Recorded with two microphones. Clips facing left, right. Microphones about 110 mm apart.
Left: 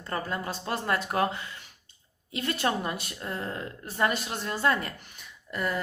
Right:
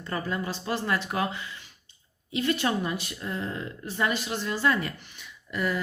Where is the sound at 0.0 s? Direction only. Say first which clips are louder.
Right 1 dB; 40° left (ahead or behind).